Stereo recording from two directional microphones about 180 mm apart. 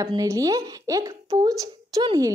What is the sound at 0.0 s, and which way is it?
Speech, 20° right (ahead or behind).